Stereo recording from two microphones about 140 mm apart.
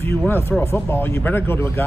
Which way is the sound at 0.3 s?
15° left (ahead or behind).